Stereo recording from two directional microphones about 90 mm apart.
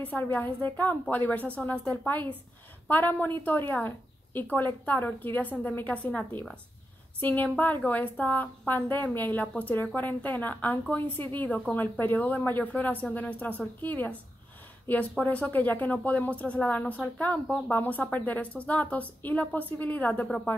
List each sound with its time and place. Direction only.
0.0 s a woman's voice: 20° left (ahead or behind)